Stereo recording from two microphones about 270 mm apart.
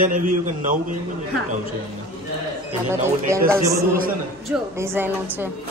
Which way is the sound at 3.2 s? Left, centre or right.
Centre.